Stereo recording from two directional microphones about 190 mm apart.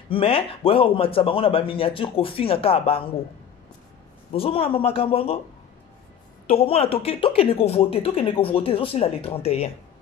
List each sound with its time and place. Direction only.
0.1 s speech: 30° left (ahead or behind)
4.3 s speech: 30° left (ahead or behind)
6.5 s speech: 30° left (ahead or behind)